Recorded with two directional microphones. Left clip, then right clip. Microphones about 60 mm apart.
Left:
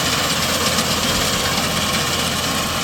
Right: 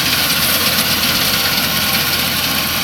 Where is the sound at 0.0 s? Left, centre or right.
Left.